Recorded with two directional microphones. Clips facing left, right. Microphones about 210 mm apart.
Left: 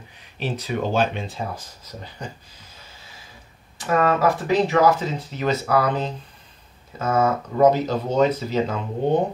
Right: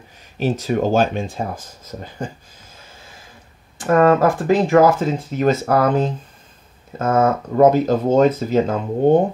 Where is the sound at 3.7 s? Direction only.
50° right (ahead or behind).